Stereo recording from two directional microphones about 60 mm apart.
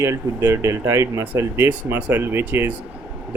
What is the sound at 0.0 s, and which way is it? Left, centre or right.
Speech, right.